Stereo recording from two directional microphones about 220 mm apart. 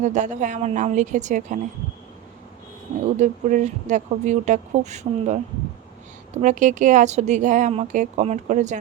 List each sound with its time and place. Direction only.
0.0 s a woman's voice: 35° right (ahead or behind)
3.2 s a woman's voice: 35° right (ahead or behind)